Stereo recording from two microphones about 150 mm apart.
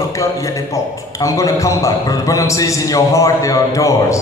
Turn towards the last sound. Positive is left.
turn(degrees=20)  # may be behind; listen again after turning